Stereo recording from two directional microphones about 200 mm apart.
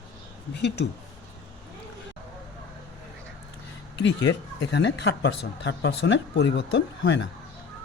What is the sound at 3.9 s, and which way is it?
Speech, 65° left (ahead or behind).